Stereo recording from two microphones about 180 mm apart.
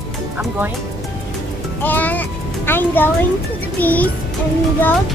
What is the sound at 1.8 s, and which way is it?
Speech, 10° left (ahead or behind).